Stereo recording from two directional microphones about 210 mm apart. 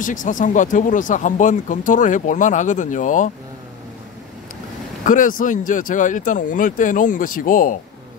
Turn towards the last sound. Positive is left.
turn(degrees=40)  # may be behind; listen again after turning